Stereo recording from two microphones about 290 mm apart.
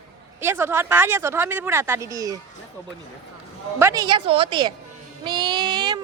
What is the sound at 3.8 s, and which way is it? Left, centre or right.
Speech, centre.